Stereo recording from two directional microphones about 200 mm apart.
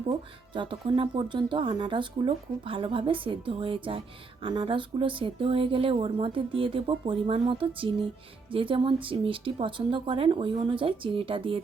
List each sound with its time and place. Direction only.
0.5 s speech: 25° right (ahead or behind)